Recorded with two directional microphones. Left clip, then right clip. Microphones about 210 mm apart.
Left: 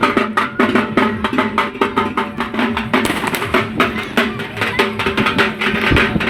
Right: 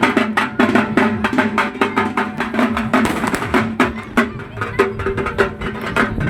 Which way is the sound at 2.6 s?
60° right (ahead or behind).